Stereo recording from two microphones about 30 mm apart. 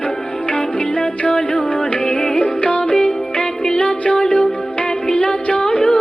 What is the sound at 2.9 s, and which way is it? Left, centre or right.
Music, left.